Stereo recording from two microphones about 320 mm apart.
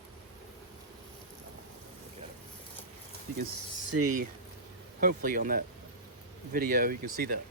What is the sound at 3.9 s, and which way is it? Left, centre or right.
Speech, right.